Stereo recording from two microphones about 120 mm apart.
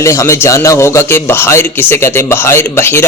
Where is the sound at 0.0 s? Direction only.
25° left (ahead or behind).